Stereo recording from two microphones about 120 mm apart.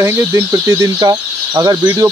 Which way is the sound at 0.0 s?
20° right (ahead or behind).